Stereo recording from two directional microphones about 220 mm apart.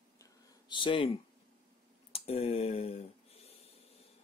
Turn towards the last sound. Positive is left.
turn(degrees=30)  # may be behind; listen again after turning